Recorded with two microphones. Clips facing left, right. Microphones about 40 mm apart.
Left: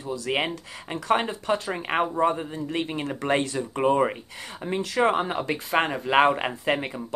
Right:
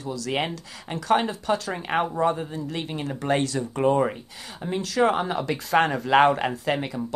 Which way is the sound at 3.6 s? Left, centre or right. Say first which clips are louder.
Even; left.